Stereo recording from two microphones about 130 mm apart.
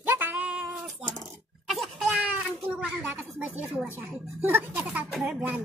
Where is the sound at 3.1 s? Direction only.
15° right (ahead or behind).